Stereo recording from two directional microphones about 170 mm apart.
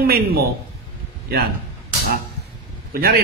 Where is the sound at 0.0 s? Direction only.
65° right (ahead or behind).